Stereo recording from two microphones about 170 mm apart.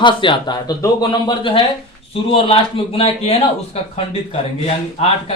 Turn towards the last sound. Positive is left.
turn(degrees=35)  # may be behind; listen again after turning